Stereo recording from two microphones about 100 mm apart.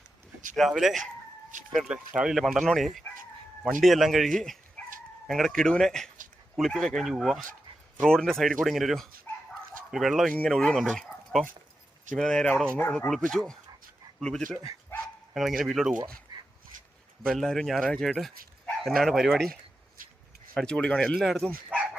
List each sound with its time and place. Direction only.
0.5 s speech: centre (ahead or behind)
4.8 s chicken: 10° left (ahead or behind)
5.3 s speech: 5° left (ahead or behind)
13.1 s speech: 5° left (ahead or behind)
16.3 s dog: 50° right (ahead or behind)
17.2 s speech: 5° left (ahead or behind)
20.5 s speech: 10° left (ahead or behind)